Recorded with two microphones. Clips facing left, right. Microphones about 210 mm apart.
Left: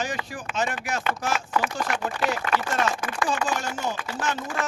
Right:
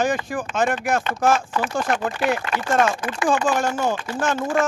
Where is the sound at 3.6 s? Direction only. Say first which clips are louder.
Right 8 dB; 50° right (ahead or behind).